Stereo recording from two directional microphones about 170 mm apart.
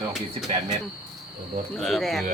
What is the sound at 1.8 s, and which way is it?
Speech, centre (ahead or behind).